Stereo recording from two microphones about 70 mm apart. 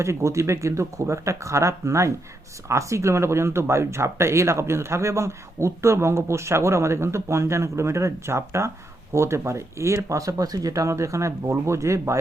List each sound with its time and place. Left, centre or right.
0.0 s speech: right